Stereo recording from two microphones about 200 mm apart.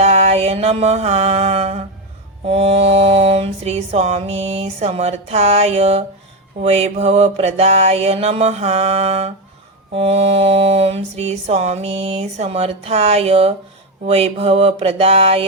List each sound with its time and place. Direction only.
0.0 s mantra: 30° right (ahead or behind)